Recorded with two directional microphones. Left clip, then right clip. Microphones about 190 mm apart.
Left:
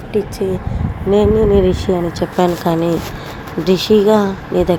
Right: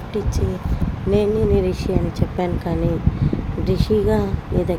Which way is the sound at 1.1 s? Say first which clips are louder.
Left 6 dB; 15° left (ahead or behind).